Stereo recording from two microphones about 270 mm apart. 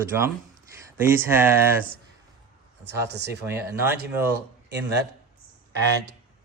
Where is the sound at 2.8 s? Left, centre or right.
Right.